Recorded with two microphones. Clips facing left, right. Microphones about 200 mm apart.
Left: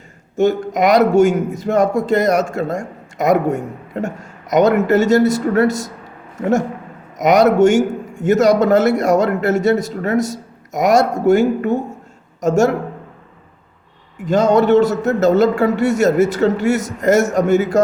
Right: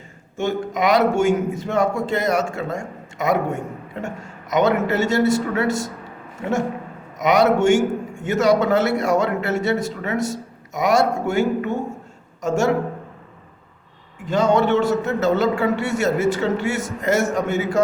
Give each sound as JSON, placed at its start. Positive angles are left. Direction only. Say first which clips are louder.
{"t": 0.3, "sound": "a man's voice", "louder": "left 7 dB", "side_deg": 40}
{"t": 7.2, "sound": "a man's voice", "louder": "left 5 dB", "side_deg": 40}
{"t": 14.3, "sound": "a man's voice", "louder": "left 5 dB", "side_deg": 40}